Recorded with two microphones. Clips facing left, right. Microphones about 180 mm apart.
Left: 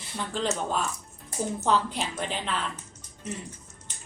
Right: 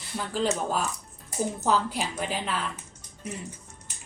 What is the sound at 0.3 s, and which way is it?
A woman's voice, 5° right (ahead or behind).